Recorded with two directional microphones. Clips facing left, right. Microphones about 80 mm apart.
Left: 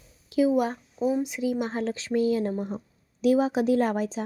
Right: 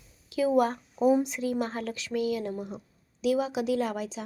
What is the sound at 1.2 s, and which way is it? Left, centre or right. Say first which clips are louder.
Speech: left 2 dB; centre.